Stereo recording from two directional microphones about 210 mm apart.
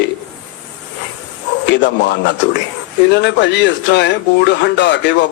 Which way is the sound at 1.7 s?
55° left (ahead or behind).